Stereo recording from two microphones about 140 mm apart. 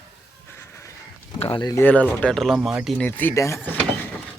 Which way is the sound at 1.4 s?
40° left (ahead or behind).